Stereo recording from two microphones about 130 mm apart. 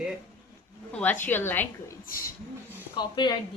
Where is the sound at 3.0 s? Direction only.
35° left (ahead or behind).